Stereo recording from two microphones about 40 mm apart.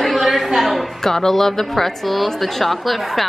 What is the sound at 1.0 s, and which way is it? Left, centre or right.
A woman's voice, centre.